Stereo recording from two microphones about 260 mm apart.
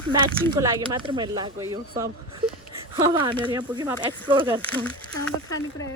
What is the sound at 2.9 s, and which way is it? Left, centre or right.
Speech, centre.